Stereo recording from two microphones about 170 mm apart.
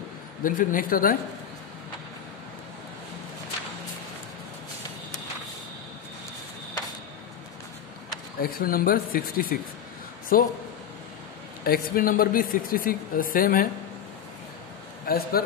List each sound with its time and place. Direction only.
0.4 s speech: 50° left (ahead or behind)
8.4 s speech: 60° left (ahead or behind)
11.6 s speech: 60° left (ahead or behind)
15.0 s speech: 60° left (ahead or behind)